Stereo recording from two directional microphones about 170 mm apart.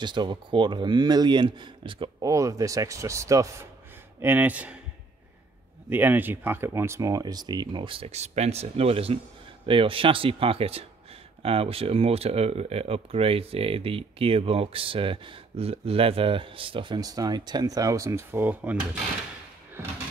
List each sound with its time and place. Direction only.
0.0 s speech: 25° right (ahead or behind)
2.3 s speech: 20° right (ahead or behind)
5.9 s speech: 10° right (ahead or behind)